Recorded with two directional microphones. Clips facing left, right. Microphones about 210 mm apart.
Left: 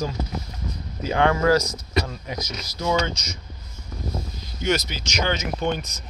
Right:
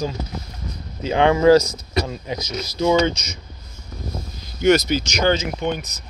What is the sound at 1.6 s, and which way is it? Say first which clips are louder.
Speech: right 2 dB; 10° right (ahead or behind).